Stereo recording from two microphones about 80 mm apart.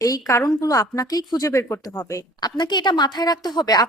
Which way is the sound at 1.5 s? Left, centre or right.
Left.